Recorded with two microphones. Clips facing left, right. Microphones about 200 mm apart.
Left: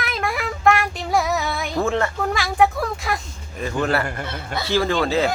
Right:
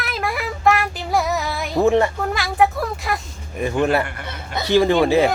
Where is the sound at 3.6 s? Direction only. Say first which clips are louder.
Right 3 dB; 15° right (ahead or behind).